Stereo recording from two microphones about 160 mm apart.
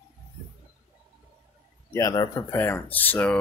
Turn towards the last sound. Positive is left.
turn(degrees=10)  # may be behind; listen again after turning